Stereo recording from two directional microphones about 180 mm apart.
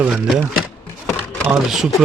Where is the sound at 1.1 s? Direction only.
5° left (ahead or behind).